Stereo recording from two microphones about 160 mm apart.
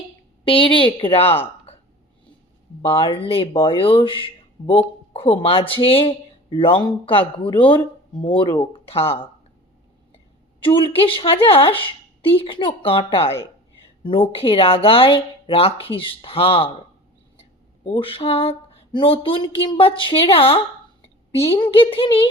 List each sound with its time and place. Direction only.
0.4 s speech: 35° left (ahead or behind)
1.7 s a sound: 40° left (ahead or behind)
2.8 s speech: 35° left (ahead or behind)
10.6 s speech: 35° left (ahead or behind)
17.8 s speech: 35° left (ahead or behind)
21.6 s speech: 35° left (ahead or behind)